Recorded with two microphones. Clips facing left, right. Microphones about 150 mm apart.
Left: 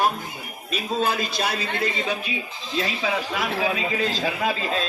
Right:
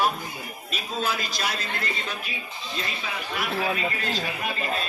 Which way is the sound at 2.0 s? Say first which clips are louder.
Left 7 dB; 90° left.